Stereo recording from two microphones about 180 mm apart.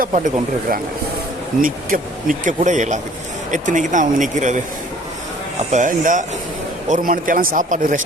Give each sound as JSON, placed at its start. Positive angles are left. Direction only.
{"t": 0.0, "sound": "speech", "side_deg": -45}
{"t": 1.6, "sound": "speech", "side_deg": -50}
{"t": 5.7, "sound": "speech", "side_deg": -45}